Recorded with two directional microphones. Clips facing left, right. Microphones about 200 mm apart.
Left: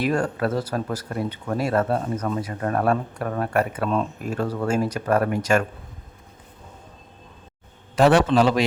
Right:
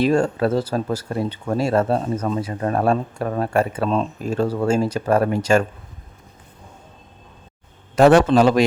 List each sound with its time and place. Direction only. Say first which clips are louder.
0.0 s speech: right 5 dB; 25° right (ahead or behind)
7.9 s a man's voice: right 4 dB; 45° right (ahead or behind)